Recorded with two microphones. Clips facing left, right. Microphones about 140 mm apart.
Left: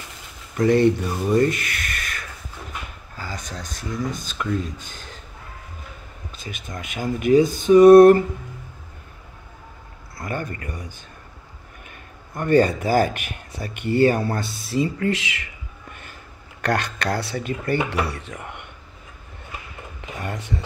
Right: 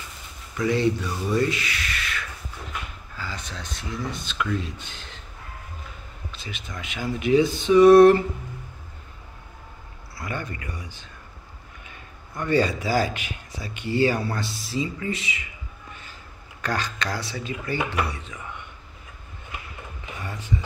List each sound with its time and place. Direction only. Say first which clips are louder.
0.6 s a man's voice: left 6 dB; 50° left (ahead or behind)
6.3 s a man's voice: left 3 dB; 45° left (ahead or behind)
10.1 s a man's voice: left 3 dB; 45° left (ahead or behind); by 15.4 s 85° left
15.9 s a sound: left 2 dB; 55° left (ahead or behind)
16.6 s speech: left 5 dB; 60° left (ahead or behind)
20.2 s speech: left 2 dB; 70° left (ahead or behind)